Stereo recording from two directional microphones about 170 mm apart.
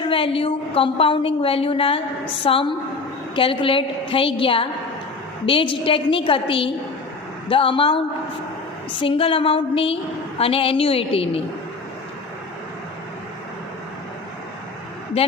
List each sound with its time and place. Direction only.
0.0 s a woman's voice: 30° left (ahead or behind)